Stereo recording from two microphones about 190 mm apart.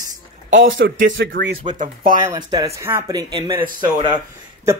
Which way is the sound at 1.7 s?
40° right (ahead or behind).